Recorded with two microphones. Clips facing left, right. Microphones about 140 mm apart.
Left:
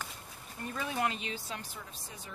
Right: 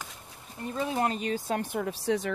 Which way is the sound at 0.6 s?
30° right (ahead or behind).